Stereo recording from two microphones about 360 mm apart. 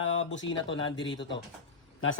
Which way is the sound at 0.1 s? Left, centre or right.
Left.